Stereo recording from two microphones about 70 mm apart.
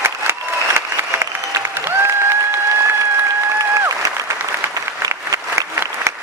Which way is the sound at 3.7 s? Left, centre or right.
Right.